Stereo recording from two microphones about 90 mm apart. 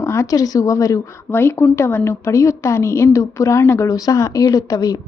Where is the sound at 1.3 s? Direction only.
25° left (ahead or behind).